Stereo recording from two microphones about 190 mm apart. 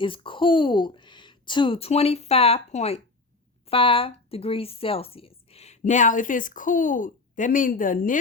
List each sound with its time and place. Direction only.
0.0 s speech: 25° left (ahead or behind); by 8.2 s 45° left (ahead or behind)